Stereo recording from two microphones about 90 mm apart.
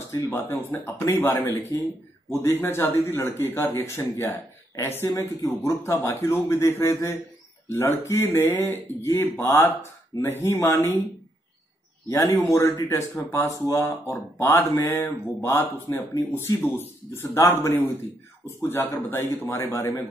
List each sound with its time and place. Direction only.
0.1 s speech: 25° left (ahead or behind)
12.4 s speech: 35° left (ahead or behind)